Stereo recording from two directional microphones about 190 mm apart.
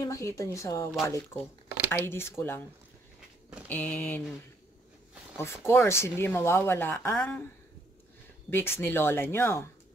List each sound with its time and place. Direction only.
0.0 s a woman's voice: 15° left (ahead or behind)
3.6 s a woman's voice: 10° left (ahead or behind)
5.7 s a woman's voice: 15° left (ahead or behind)
8.5 s a woman's voice: 10° left (ahead or behind)